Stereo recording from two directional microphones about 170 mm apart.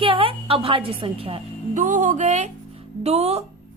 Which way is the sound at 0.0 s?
30° right (ahead or behind).